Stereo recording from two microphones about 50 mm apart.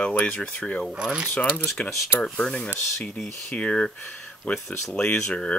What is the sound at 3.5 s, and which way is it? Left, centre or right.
Speech, left.